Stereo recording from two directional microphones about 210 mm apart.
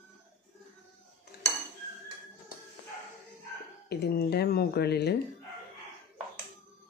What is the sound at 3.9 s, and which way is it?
Speech, 50° left (ahead or behind).